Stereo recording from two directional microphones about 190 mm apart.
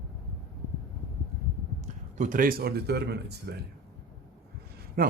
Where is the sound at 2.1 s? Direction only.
45° right (ahead or behind); by 3.3 s 60° right (ahead or behind).